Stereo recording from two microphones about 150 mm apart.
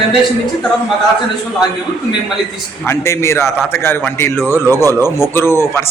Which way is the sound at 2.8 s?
15° left (ahead or behind).